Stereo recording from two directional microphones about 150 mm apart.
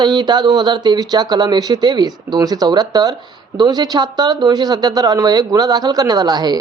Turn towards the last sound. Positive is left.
turn(degrees=-25)  # may be behind; listen again after turning